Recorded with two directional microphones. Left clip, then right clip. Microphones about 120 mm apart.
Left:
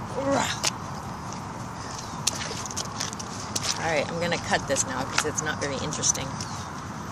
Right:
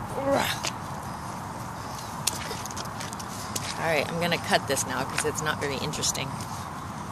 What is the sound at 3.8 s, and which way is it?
Speech, 30° right (ahead or behind).